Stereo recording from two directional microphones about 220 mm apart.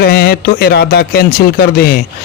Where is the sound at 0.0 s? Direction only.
45° left (ahead or behind).